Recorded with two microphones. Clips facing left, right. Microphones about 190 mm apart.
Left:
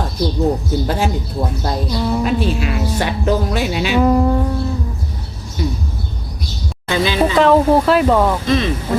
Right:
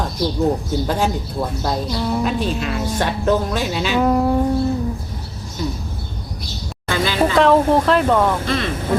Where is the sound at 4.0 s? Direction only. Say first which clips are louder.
Left 3 dB; centre (ahead or behind).